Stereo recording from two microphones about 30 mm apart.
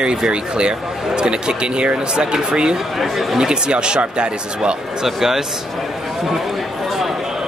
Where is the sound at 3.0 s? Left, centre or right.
Centre.